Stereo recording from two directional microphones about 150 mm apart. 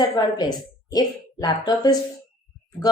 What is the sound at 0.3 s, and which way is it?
Speech, 25° left (ahead or behind).